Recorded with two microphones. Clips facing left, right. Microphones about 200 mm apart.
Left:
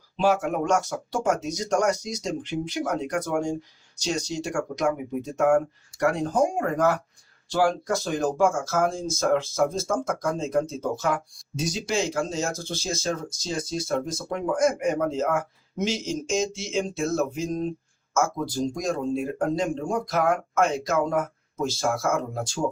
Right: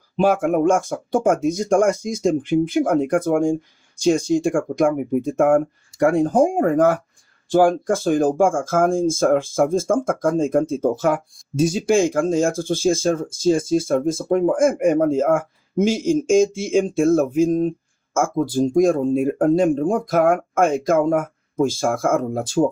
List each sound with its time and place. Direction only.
0.2 s speech: 55° right (ahead or behind)